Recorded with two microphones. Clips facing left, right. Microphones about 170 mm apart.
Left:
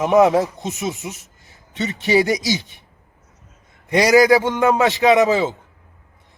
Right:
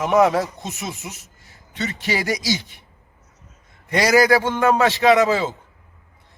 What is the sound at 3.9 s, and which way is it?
Speech, 15° left (ahead or behind).